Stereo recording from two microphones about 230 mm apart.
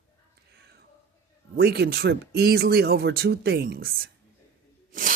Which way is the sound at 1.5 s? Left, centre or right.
Right.